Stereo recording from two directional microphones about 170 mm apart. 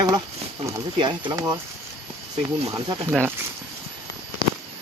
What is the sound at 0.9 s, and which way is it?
Speech, 25° right (ahead or behind).